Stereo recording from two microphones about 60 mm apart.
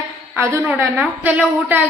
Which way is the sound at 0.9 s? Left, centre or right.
Right.